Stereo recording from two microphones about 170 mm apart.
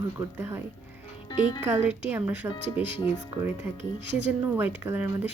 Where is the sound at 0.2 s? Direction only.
15° right (ahead or behind).